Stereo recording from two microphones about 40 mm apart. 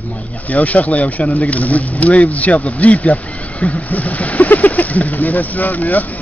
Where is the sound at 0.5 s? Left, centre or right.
Left.